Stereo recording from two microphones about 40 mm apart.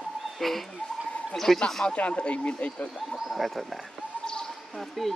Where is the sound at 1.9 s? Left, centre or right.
Left.